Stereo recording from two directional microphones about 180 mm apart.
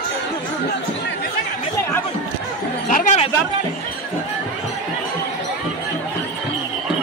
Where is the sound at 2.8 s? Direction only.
45° left (ahead or behind).